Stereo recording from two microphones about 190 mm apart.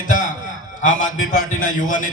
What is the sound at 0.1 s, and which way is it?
A man's voice, 40° left (ahead or behind).